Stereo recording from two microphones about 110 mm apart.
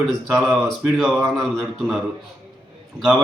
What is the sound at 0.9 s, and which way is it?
Speech, centre (ahead or behind).